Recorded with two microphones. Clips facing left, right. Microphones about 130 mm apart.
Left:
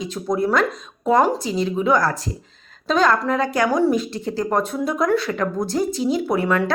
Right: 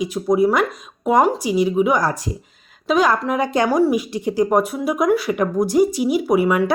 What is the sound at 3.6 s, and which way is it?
Speech, 5° right (ahead or behind).